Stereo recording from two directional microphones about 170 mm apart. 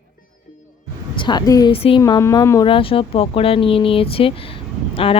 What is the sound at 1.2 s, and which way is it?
Speech, 25° left (ahead or behind).